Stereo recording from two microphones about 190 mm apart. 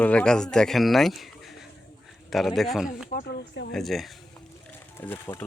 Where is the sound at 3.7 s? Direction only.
Centre (ahead or behind).